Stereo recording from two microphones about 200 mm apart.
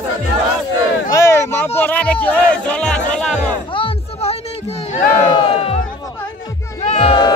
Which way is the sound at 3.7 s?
30° left (ahead or behind).